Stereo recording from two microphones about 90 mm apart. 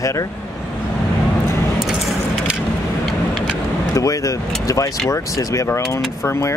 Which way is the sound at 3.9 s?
40° left (ahead or behind).